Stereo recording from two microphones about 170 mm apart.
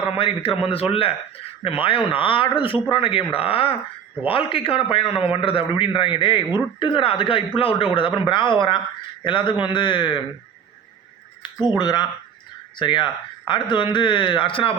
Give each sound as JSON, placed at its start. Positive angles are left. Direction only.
{"t": 0.0, "sound": "speech", "side_deg": 35}
{"t": 11.4, "sound": "speech", "side_deg": 25}